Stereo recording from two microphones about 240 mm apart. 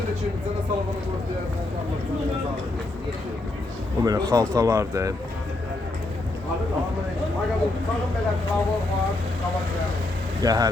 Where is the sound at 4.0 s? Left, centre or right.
Centre.